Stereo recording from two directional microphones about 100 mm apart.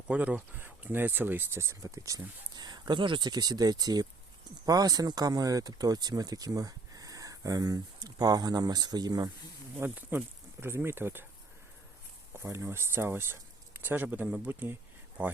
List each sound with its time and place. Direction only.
0.1 s speech: 15° right (ahead or behind); by 9.3 s 40° right (ahead or behind)
9.7 s speech: 15° right (ahead or behind)
12.4 s speech: 30° right (ahead or behind)